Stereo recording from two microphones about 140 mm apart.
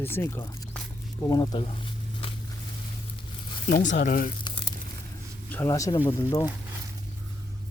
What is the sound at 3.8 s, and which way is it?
Speech, 70° left (ahead or behind).